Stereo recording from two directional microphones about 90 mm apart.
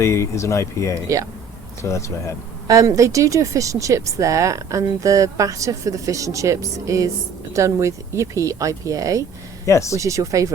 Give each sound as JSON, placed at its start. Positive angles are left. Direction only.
{"t": 0.0, "sound": "speech", "side_deg": 30}
{"t": 2.6, "sound": "speech", "side_deg": -40}
{"t": 9.6, "sound": "speech", "side_deg": 35}
{"t": 10.0, "sound": "speech", "side_deg": -35}